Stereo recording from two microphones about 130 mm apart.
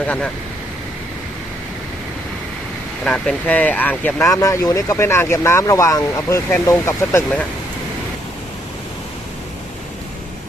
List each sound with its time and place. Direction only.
3.0 s speech: 5° left (ahead or behind)
4.3 s speech: 25° left (ahead or behind)